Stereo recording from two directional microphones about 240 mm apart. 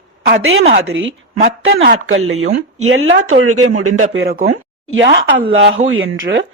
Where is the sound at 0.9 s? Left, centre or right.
Right.